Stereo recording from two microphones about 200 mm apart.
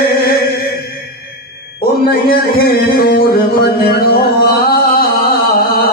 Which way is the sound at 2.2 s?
50° left (ahead or behind).